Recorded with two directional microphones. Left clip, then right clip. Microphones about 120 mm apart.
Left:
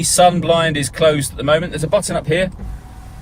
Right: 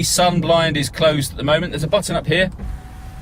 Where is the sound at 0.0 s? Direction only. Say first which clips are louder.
Left 4 dB; 40° left (ahead or behind).